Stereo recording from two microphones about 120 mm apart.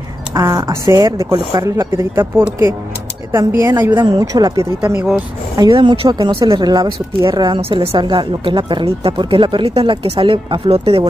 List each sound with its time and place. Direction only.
0.3 s speech: 30° right (ahead or behind)
2.1 s speech: 20° right (ahead or behind)
5.7 s speech: 40° right (ahead or behind)